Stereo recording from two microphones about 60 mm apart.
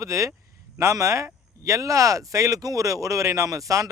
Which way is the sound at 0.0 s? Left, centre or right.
Right.